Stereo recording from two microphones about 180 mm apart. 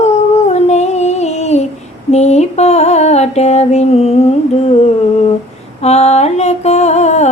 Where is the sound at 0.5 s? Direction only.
40° left (ahead or behind).